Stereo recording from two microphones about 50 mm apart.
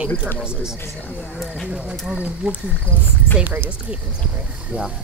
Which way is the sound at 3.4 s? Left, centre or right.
Right.